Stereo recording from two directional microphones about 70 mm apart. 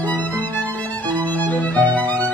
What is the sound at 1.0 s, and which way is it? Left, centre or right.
Violin, left.